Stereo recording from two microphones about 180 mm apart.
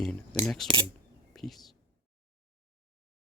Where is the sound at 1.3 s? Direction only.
Centre (ahead or behind).